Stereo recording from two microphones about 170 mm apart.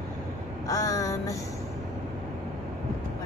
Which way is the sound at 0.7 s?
20° left (ahead or behind).